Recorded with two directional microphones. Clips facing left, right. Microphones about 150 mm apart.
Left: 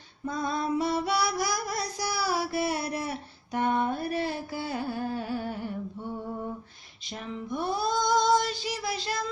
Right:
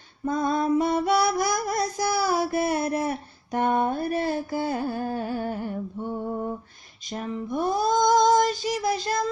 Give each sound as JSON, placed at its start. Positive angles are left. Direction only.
{"t": 0.2, "sound": "music", "side_deg": -50}
{"t": 7.1, "sound": "female singing", "side_deg": -45}